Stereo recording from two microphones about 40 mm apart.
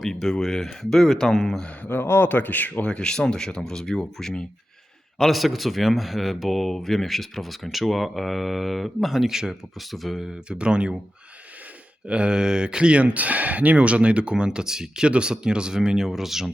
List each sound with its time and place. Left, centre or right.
0.2 s speech: centre
1.9 s speech: left
2.8 s speech: left
5.3 s speech: centre
9.3 s speech: centre
9.7 s speech: centre
10.5 s speech: right
12.0 s speech: right; by 16.5 s centre